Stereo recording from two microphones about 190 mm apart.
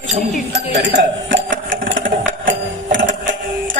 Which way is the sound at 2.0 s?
45° right (ahead or behind).